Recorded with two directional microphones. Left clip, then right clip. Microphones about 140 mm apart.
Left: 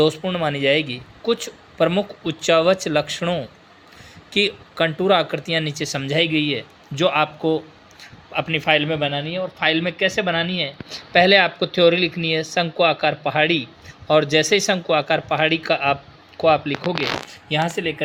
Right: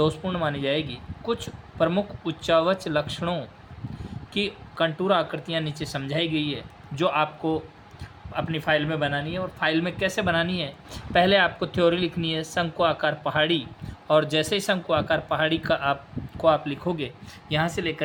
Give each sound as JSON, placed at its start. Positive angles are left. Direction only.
{"t": 0.2, "sound": "speech", "side_deg": 20}
{"t": 0.4, "sound": "speech", "side_deg": 35}